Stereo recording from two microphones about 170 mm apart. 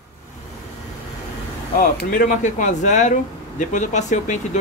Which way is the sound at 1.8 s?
50° left (ahead or behind).